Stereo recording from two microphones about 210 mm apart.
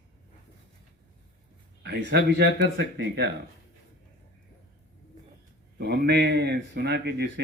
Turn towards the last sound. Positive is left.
turn(degrees=-50)  # may be behind; listen again after turning